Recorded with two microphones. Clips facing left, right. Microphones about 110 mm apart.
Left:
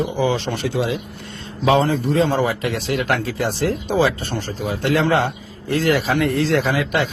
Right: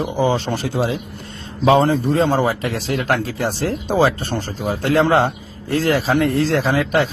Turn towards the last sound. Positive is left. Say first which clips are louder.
# right 2 dB
turn(degrees=-35)  # may be behind; listen again after turning